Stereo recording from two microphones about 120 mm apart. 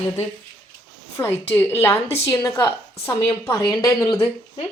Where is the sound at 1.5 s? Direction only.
15° left (ahead or behind).